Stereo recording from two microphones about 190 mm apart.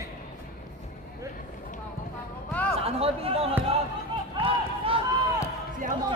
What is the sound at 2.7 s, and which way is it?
Chatter, 30° right (ahead or behind).